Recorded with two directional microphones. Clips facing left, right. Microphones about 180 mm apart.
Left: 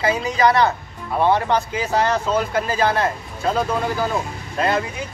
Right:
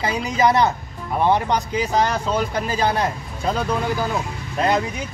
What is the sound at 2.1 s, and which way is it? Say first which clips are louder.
Speech: left 2 dB; 15° right (ahead or behind).